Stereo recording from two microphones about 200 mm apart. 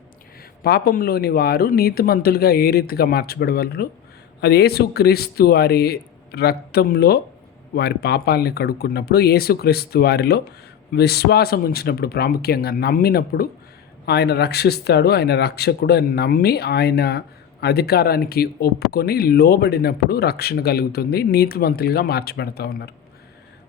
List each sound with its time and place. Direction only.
0.6 s speech: 50° left (ahead or behind)